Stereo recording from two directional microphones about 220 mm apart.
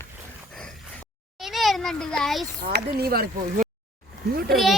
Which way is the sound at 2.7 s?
45° right (ahead or behind).